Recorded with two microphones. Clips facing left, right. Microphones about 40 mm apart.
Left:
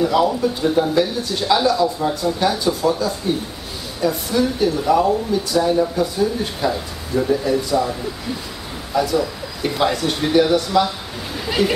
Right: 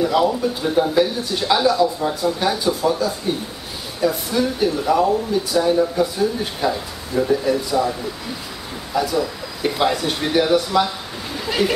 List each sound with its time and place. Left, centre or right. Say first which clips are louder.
0.0 s a man's voice: left 1 dB; centre
4.0 s a man's voice: left 1 dB; centre
8.9 s a man's voice: left 2 dB; centre
11.3 s a sound: left 1 dB; centre